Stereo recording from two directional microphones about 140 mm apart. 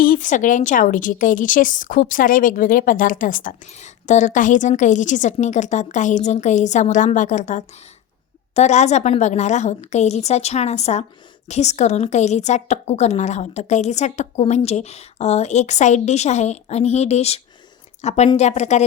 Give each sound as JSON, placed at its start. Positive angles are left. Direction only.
{"t": 0.0, "sound": "a woman's voice", "side_deg": 80}